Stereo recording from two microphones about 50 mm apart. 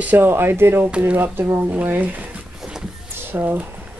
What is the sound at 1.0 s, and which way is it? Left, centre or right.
Speech, right.